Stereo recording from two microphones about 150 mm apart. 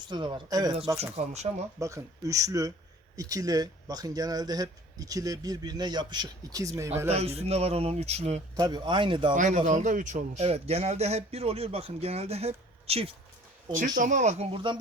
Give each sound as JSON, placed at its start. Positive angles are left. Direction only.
{"t": 0.1, "sound": "speech", "side_deg": -30}
{"t": 0.9, "sound": "a man's voice", "side_deg": -45}
{"t": 1.8, "sound": "speech", "side_deg": -20}
{"t": 7.1, "sound": "a man's voice", "side_deg": -45}
{"t": 8.5, "sound": "speech", "side_deg": -30}
{"t": 9.3, "sound": "a man's voice", "side_deg": -60}
{"t": 13.7, "sound": "speech", "side_deg": -60}
{"t": 14.5, "sound": "speech", "side_deg": -30}